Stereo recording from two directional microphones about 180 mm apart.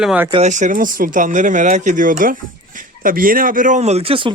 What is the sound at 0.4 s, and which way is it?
Speech, 45° right (ahead or behind).